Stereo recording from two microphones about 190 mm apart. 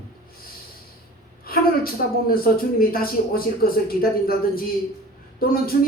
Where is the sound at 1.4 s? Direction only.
50° left (ahead or behind).